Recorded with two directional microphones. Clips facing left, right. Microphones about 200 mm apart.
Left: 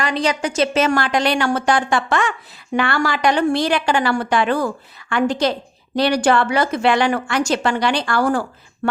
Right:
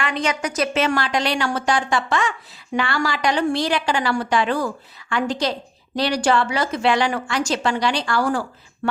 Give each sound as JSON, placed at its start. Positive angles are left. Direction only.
{"t": 0.0, "sound": "a woman's voice", "side_deg": 35}
{"t": 0.8, "sound": "a woman's voice", "side_deg": 50}